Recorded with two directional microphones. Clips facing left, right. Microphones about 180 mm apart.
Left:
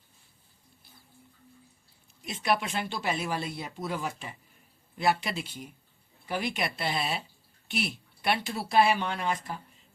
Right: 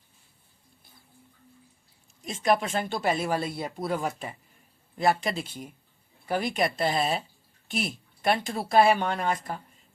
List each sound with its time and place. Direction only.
2.2 s speech: 45° right (ahead or behind)